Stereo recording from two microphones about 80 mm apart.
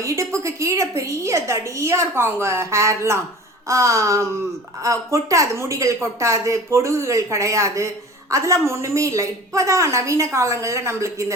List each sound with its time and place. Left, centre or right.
0.0 s a woman's voice: right